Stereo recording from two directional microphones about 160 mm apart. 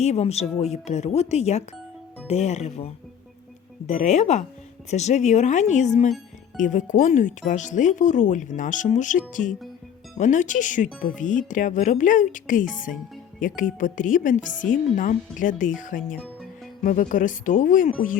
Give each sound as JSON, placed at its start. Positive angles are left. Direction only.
{"t": 0.0, "sound": "speech", "side_deg": 40}
{"t": 16.1, "sound": "music", "side_deg": 5}
{"t": 16.8, "sound": "speech", "side_deg": 55}